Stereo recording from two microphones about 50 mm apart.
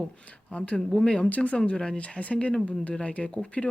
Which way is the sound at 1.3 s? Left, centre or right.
Left.